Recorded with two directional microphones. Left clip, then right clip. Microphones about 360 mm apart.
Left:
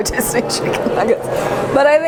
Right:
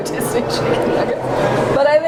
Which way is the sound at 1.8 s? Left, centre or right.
Left.